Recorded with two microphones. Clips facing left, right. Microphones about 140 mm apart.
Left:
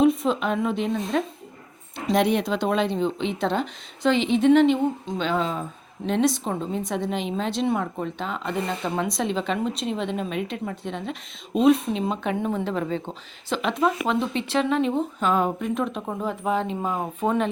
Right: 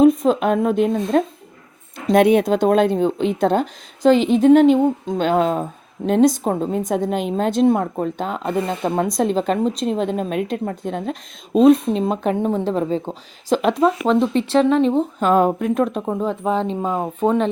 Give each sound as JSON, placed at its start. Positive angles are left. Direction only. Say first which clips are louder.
{"t": 0.0, "sound": "a woman's voice", "louder": "right 6 dB", "side_deg": -45}
{"t": 15.3, "sound": "a woman's voice", "louder": "right 7 dB", "side_deg": -45}
{"t": 16.0, "sound": "speech", "louder": "right 5 dB", "side_deg": -25}